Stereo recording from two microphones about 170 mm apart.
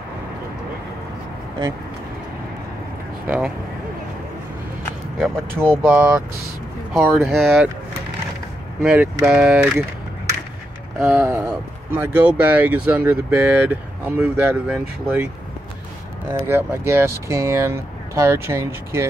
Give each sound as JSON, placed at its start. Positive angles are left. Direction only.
{"t": 3.3, "sound": "speech", "side_deg": -10}
{"t": 5.2, "sound": "speech", "side_deg": -10}
{"t": 8.8, "sound": "speech", "side_deg": -5}
{"t": 11.0, "sound": "speech", "side_deg": -10}
{"t": 16.4, "sound": "speech", "side_deg": -15}